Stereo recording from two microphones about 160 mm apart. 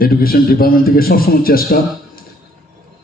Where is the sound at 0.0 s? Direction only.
65° left (ahead or behind).